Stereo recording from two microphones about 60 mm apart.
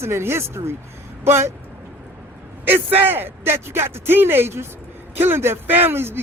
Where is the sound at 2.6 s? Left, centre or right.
Right.